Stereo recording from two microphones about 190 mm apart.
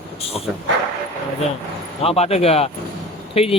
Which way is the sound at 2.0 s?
30° left (ahead or behind).